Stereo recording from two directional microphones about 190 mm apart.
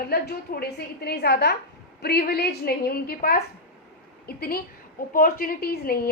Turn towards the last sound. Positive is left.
turn(degrees=55)  # may be behind; listen again after turning